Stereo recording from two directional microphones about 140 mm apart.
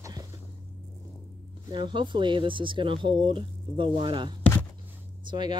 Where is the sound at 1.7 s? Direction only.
35° right (ahead or behind).